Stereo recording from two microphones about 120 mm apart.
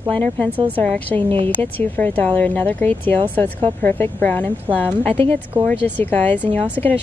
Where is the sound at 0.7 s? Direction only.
15° left (ahead or behind).